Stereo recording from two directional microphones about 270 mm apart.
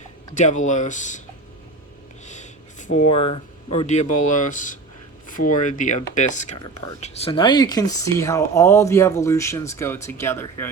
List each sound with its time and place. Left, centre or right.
0.3 s speech: left
2.2 s speech: left; by 10.7 s centre